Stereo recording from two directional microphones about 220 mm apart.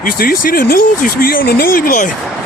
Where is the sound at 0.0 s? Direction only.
45° left (ahead or behind).